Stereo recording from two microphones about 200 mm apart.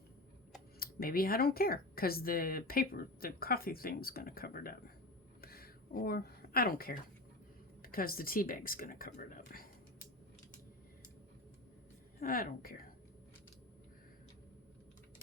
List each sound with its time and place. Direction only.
0.8 s speech: 50° left (ahead or behind)
5.4 s a sound: 50° left (ahead or behind)
7.8 s speech: 45° left (ahead or behind)
12.2 s speech: 45° left (ahead or behind)